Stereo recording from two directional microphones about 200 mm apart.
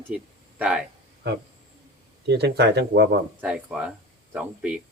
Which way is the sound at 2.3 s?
55° right (ahead or behind).